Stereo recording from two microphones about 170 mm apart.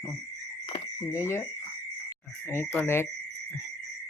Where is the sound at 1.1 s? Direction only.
15° left (ahead or behind).